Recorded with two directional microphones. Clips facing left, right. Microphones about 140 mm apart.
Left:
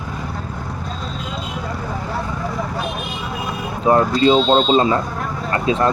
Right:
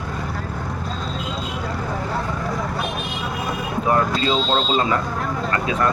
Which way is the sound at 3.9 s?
25° left (ahead or behind).